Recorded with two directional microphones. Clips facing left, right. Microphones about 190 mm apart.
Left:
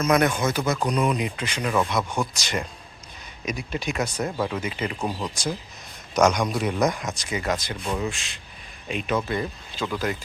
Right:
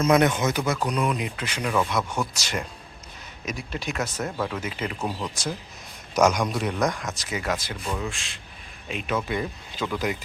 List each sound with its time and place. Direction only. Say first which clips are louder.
0.0 s speech: right 1 dB; 25° right (ahead or behind)
0.9 s speech: left 2 dB; centre (ahead or behind)
1.6 s speech: left 1 dB; 5° left (ahead or behind)
2.3 s speech: left 2 dB; 5° right (ahead or behind)
4.3 s speech: left 2 dB; 10° left (ahead or behind)
4.6 s speech: left 2 dB; 5° right (ahead or behind)
9.2 s speech: left 1 dB; 10° right (ahead or behind)